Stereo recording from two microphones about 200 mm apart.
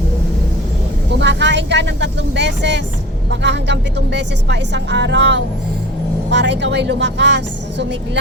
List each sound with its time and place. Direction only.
1.2 s speech: 60° right (ahead or behind)